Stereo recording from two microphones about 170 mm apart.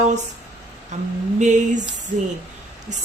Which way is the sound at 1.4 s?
45° right (ahead or behind).